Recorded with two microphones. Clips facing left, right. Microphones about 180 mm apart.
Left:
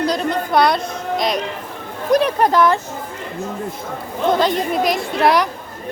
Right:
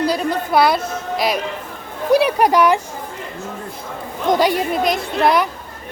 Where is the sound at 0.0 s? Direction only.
5° right (ahead or behind).